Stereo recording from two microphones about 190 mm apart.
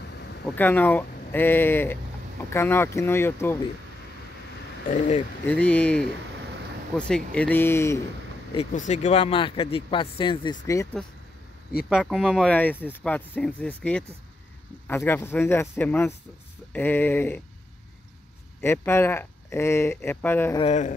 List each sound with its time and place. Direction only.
0.0 s a sound: 60° left (ahead or behind)
0.6 s speech: 10° left (ahead or behind)
4.8 s speech: 40° left (ahead or behind)
5.5 s speech: 5° left (ahead or behind)
8.7 s speech: 40° left (ahead or behind)
11.0 s speech: 5° left (ahead or behind)
18.6 s speech: 10° left (ahead or behind)